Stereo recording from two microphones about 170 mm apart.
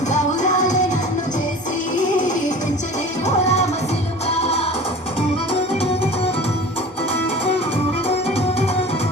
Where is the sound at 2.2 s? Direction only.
50° left (ahead or behind).